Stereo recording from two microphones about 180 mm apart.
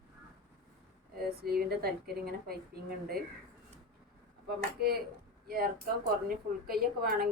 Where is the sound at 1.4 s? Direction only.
60° right (ahead or behind).